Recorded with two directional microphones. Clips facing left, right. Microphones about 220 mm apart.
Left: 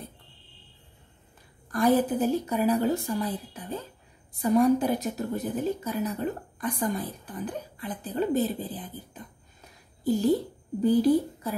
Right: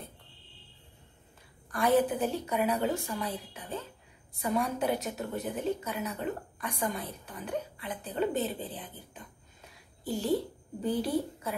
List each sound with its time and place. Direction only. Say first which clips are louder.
1.7 s a woman's voice: left 3 dB; 35° left (ahead or behind)
10.9 s a woman's voice: left 8 dB; 35° left (ahead or behind)